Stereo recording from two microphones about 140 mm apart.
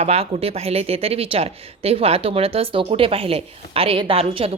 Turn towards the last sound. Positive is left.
turn(degrees=-45)  # may be behind; listen again after turning